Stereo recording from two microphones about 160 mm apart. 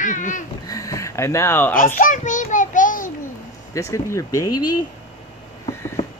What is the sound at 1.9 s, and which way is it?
Child singing, 55° left (ahead or behind).